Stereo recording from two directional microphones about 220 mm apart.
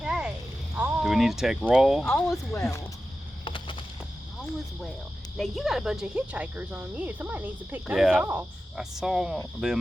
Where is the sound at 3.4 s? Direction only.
25° left (ahead or behind).